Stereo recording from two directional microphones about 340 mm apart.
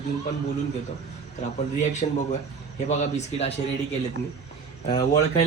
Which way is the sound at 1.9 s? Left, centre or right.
Left.